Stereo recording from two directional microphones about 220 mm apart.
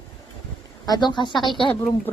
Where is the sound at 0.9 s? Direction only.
20° left (ahead or behind).